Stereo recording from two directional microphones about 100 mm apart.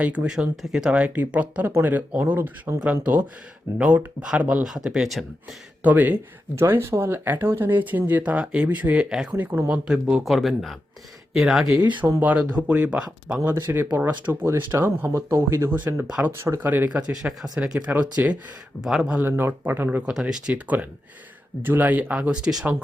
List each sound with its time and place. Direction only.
0.0 s speech: 15° right (ahead or behind)
5.8 s speech: 15° right (ahead or behind)
9.3 s speech: 20° right (ahead or behind)
16.4 s speech: 20° right (ahead or behind)
18.8 s speech: 5° right (ahead or behind)
19.2 s speech: 20° right (ahead or behind)
20.1 s speech: 5° right (ahead or behind)